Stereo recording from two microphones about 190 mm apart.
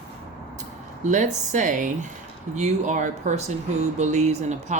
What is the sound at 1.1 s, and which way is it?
Speech, 40° right (ahead or behind).